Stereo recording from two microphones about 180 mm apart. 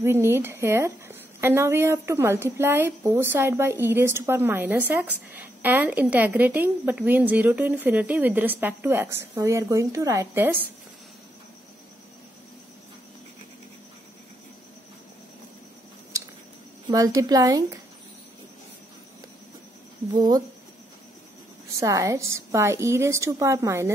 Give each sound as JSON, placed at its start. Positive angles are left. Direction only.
{"t": 0.0, "sound": "a woman's voice", "side_deg": -15}
{"t": 16.8, "sound": "a woman's voice", "side_deg": -20}
{"t": 20.1, "sound": "a woman's voice", "side_deg": -25}
{"t": 21.7, "sound": "a woman's voice", "side_deg": -20}